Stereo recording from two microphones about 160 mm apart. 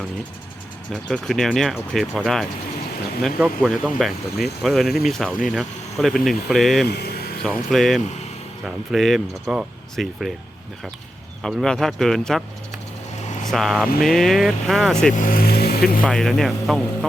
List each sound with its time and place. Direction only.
0.9 s speech: centre (ahead or behind)
6.8 s a sound: 90° left; by 7.4 s 75° left (ahead or behind)
7.4 s speech: centre (ahead or behind)
11.4 s speech: 5° left (ahead or behind)
13.5 s speech: centre (ahead or behind)
15.1 s speech: 60° left (ahead or behind); by 16.0 s 75° left (ahead or behind)
16.0 s speech: 5° left (ahead or behind)